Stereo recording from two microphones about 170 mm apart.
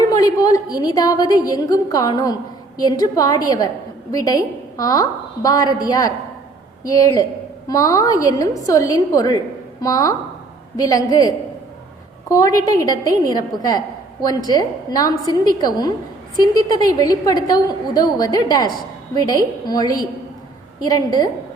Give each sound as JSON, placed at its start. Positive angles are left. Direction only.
{"t": 0.1, "sound": "a woman's voice", "side_deg": 20}